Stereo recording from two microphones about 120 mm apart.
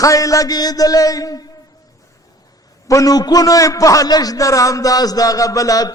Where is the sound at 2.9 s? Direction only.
30° left (ahead or behind).